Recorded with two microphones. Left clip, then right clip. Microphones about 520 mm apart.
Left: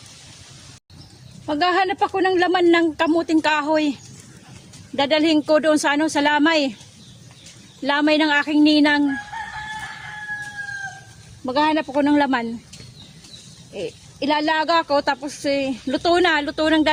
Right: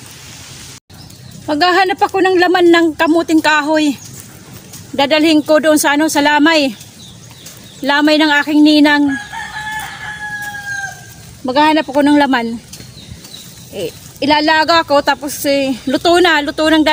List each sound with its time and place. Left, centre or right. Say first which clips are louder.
1.5 s speech: right 7 dB; left
4.9 s speech: right 7 dB; left
7.9 s speech: right 7 dB; left
11.4 s speech: right 8 dB; left
13.7 s speech: right 7 dB; left